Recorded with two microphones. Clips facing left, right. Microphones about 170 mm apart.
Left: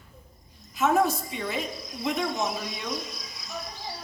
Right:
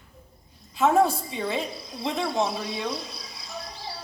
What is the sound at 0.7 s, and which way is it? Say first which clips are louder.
Cricket: right 3 dB; 30° right (ahead or behind).